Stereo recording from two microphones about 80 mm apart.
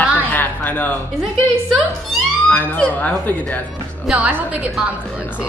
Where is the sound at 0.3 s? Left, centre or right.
Left.